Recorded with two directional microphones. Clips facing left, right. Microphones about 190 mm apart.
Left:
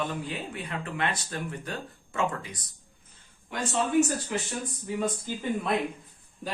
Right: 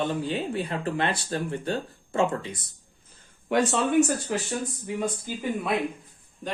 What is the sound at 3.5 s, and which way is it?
Speech, 75° right (ahead or behind).